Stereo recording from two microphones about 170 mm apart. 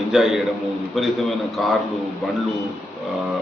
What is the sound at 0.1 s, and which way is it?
A man's voice, centre (ahead or behind).